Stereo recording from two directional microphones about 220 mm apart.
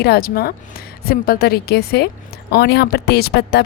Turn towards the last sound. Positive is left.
turn(degrees=45)  # may be behind; listen again after turning